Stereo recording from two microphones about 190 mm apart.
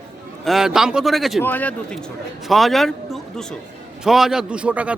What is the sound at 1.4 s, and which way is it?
Speech, 10° left (ahead or behind).